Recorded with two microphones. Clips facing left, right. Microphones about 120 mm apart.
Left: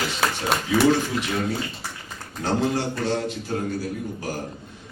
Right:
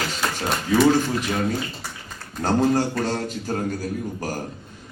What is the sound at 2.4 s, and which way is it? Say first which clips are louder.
A man's voice: right 4 dB; 45° right (ahead or behind).